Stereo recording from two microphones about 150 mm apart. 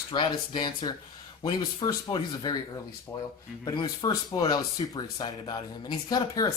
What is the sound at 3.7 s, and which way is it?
Speech, 30° left (ahead or behind).